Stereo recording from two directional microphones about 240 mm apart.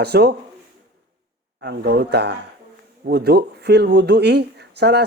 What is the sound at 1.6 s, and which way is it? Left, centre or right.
Speech, right.